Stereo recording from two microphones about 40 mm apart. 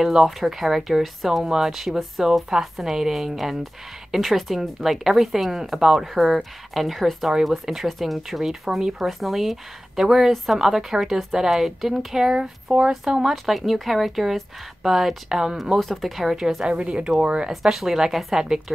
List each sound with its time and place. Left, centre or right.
0.0 s speech: centre
1.4 s speech: centre
1.7 s speech: centre
6.1 s speech: centre
13.3 s speech: centre
15.8 s speech: centre
16.6 s speech: right
17.5 s speech: centre